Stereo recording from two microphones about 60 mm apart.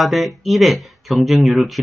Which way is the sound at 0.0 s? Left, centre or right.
Centre.